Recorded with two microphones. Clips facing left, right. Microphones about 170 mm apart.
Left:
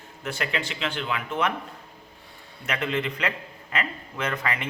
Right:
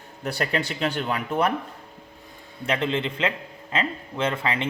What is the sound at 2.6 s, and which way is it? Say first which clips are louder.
Speech: right 3 dB; 30° right (ahead or behind).